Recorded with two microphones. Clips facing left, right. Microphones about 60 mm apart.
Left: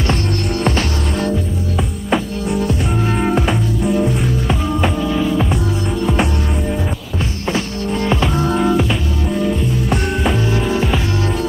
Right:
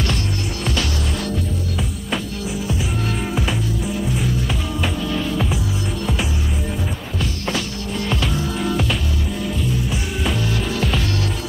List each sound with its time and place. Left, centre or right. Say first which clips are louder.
0.7 s music: left 5 dB; left
2.5 s music: left 7 dB; centre
7.5 s music: left 5 dB; left
8.5 s music: left 8 dB; centre
10.2 s music: left 5 dB; left